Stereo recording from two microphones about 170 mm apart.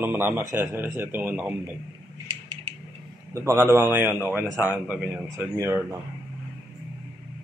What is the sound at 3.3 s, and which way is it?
A man's voice, 15° right (ahead or behind).